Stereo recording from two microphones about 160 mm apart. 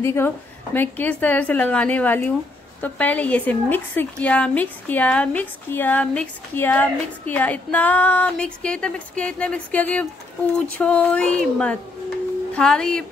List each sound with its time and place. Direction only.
0.0 s a woman's voice: 15° left (ahead or behind)